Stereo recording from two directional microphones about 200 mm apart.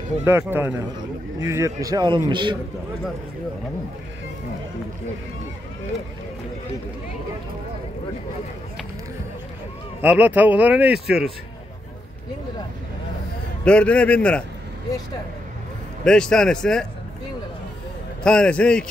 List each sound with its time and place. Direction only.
0.2 s a man's voice: 10° right (ahead or behind)
10.0 s speech: 10° right (ahead or behind)
13.7 s a man's voice: 5° left (ahead or behind)
16.0 s a man's voice: 5° left (ahead or behind)
18.2 s a man's voice: 5° left (ahead or behind)